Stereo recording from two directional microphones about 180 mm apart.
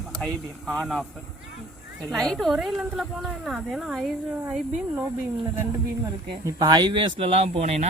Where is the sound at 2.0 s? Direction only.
Centre (ahead or behind).